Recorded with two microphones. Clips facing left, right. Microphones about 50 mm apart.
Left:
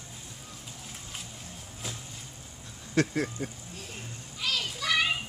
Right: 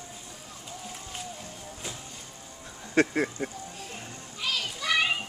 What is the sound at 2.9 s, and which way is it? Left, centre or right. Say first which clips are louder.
Speech: right 3 dB; right.